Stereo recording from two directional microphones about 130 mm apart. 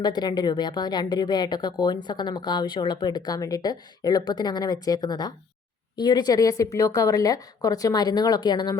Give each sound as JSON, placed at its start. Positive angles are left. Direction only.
{"t": 0.0, "sound": "a woman's voice", "side_deg": 30}